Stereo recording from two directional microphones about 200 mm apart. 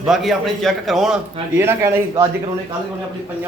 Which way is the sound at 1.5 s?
10° right (ahead or behind).